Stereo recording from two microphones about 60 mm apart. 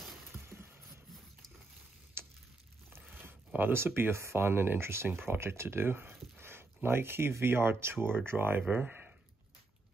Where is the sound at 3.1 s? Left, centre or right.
Right.